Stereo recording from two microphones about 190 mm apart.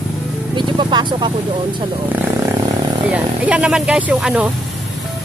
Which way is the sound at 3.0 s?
5° right (ahead or behind).